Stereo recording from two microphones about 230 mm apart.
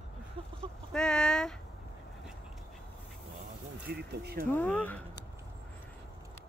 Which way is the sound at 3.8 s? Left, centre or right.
Right.